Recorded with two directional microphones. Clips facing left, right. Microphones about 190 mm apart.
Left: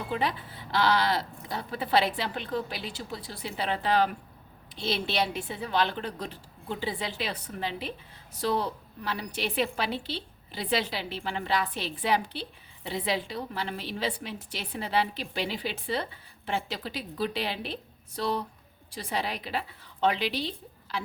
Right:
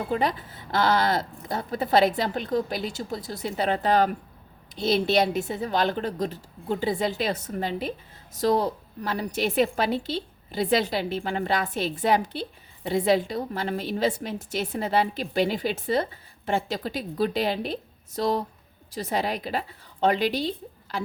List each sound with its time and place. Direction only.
0.1 s a woman's voice: 45° right (ahead or behind)